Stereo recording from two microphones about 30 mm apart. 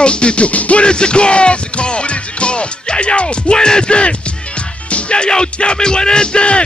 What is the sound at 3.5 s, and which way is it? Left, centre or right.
Music, left.